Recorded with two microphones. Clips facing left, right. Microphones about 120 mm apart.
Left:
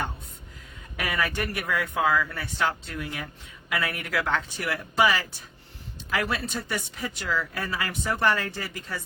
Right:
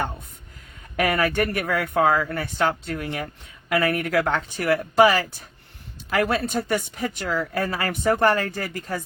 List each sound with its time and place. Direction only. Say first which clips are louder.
0.9 s speech: right 7 dB; 50° right (ahead or behind)